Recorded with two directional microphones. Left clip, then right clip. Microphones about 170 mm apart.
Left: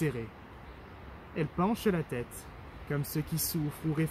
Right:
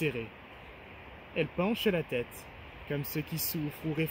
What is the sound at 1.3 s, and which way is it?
Speech, 10° left (ahead or behind).